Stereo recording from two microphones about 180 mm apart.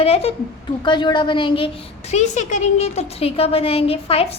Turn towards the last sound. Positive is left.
turn(degrees=30)  # may be behind; listen again after turning